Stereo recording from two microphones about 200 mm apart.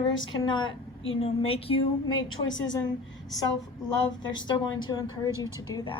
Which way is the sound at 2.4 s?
70° left (ahead or behind).